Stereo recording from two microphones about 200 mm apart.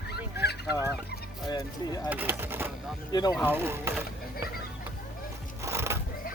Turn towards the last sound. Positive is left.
turn(degrees=-15)  # may be behind; listen again after turning